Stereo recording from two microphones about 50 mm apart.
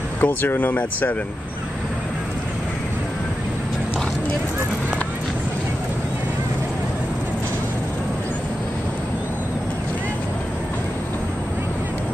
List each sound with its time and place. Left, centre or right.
0.2 s speech: left